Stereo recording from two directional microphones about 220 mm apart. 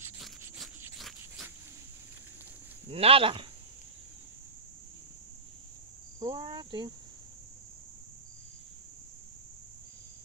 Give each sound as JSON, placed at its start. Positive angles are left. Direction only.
{"t": 0.8, "sound": "a sound", "side_deg": 0}
{"t": 2.9, "sound": "speech", "side_deg": -25}
{"t": 6.1, "sound": "speech", "side_deg": -20}